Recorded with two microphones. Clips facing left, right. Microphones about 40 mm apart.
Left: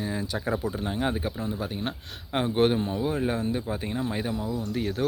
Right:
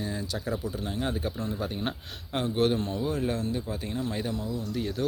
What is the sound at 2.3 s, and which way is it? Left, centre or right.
Speech, left.